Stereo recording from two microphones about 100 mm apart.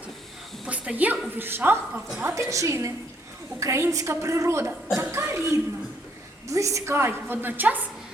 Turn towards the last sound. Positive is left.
turn(degrees=-15)  # may be behind; listen again after turning